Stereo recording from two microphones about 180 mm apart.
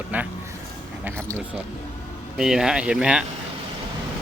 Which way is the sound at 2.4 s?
5° right (ahead or behind).